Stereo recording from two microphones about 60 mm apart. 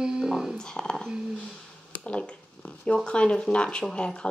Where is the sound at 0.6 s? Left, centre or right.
Centre.